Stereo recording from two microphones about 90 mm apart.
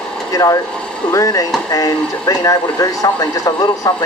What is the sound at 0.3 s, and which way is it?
Speech, 40° left (ahead or behind).